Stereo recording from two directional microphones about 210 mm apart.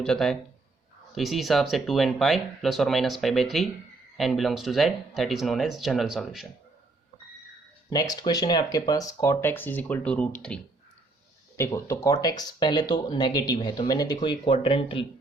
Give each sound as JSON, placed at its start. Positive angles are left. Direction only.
{"t": 0.0, "sound": "speech", "side_deg": 0}
{"t": 7.9, "sound": "speech", "side_deg": 20}